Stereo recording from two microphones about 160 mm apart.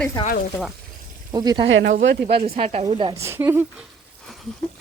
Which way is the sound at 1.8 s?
85° right.